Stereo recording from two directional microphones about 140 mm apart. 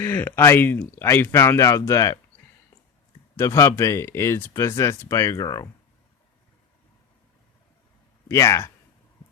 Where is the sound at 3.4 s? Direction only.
20° left (ahead or behind).